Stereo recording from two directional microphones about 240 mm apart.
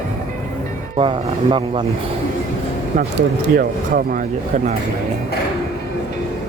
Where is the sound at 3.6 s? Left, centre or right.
Right.